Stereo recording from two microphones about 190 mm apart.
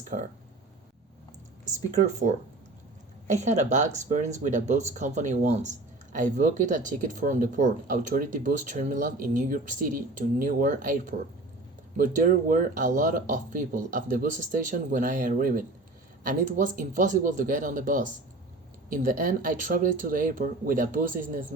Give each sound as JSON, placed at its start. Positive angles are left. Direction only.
{"t": 1.6, "sound": "speech", "side_deg": -40}